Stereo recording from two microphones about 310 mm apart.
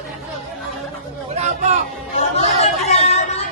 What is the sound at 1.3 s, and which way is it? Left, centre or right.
Chatter, right.